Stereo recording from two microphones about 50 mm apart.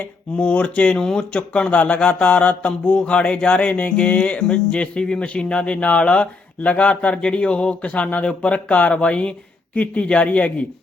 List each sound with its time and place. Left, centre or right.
0.0 s mantra: left
0.9 s speech: centre
1.3 s mantra: left